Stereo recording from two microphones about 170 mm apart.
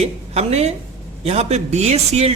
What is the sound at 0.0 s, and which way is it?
A woman's voice, 40° right (ahead or behind).